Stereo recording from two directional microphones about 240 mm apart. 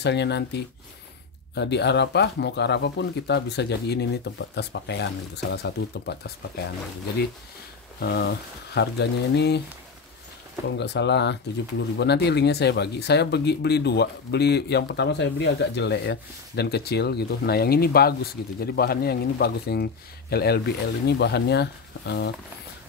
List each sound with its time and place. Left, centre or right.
0.0 s speech: left
8.0 s speech: left
10.8 s speech: left